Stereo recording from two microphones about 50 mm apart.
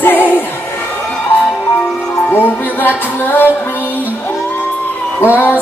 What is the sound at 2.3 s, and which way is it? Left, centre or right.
Music, left.